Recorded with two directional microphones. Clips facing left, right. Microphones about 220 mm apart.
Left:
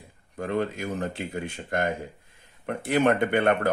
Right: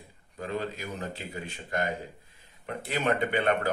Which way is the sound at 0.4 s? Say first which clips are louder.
Left 6 dB; 55° left (ahead or behind).